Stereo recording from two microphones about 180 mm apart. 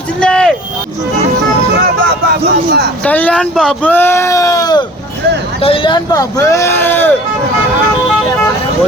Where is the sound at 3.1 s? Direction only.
10° left (ahead or behind).